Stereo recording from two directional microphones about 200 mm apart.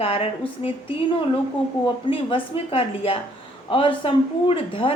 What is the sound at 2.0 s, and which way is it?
A woman's voice, 25° left (ahead or behind).